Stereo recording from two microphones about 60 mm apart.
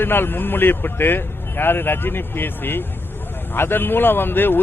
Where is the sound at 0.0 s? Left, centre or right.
Left.